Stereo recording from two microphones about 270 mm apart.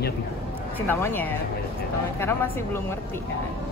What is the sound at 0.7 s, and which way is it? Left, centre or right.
Speech, centre.